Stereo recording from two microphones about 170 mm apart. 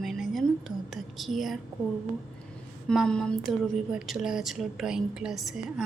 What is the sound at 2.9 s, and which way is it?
A woman's voice, centre (ahead or behind).